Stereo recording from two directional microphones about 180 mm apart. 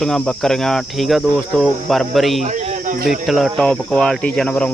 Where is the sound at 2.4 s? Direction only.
40° right (ahead or behind).